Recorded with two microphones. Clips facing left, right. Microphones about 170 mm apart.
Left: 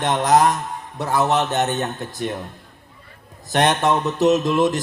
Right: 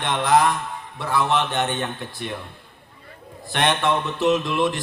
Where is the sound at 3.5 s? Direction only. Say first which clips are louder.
Left 3 dB; 40° left (ahead or behind).